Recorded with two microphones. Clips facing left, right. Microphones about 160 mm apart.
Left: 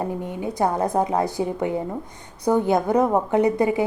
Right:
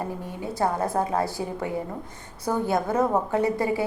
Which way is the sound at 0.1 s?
20° left (ahead or behind).